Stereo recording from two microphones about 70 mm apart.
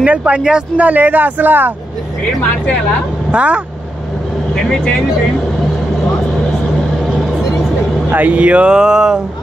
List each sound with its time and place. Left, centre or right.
0.0 s speech: centre
3.3 s speech: centre
8.1 s speech: right